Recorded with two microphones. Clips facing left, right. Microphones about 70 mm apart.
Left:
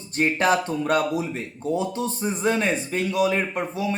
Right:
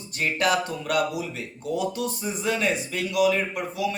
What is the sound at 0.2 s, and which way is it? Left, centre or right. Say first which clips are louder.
Speech: left 3 dB; left.